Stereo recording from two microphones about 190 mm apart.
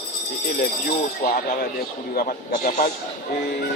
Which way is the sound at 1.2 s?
50° left (ahead or behind).